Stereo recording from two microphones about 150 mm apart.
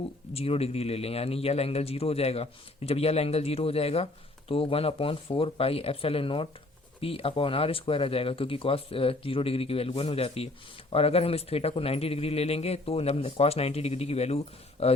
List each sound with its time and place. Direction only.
0.3 s a man's voice: 40° left (ahead or behind)